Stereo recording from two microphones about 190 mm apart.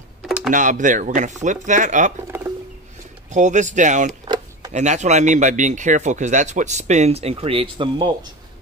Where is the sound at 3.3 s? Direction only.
40° right (ahead or behind); by 8.1 s 25° right (ahead or behind).